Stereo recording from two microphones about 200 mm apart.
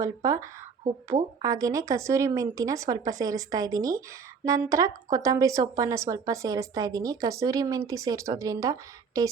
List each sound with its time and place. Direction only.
0.0 s speech: 15° right (ahead or behind)